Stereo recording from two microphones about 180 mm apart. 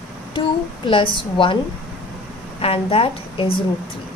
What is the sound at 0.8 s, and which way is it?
Speech, 25° left (ahead or behind).